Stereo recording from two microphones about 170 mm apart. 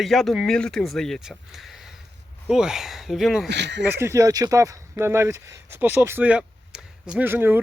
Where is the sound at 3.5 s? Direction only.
90° right.